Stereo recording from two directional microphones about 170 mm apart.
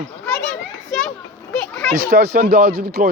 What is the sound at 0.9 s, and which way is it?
Children playing, centre (ahead or behind).